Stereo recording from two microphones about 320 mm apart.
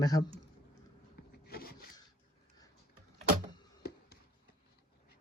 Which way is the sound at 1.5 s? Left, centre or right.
Left.